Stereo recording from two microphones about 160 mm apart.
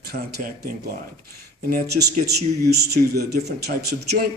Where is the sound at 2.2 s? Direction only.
90° right.